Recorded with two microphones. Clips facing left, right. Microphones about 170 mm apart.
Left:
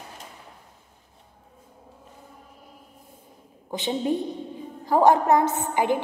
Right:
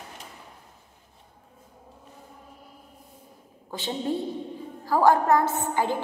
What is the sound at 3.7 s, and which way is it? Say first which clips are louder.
A woman's voice: left 4 dB; 15° left (ahead or behind).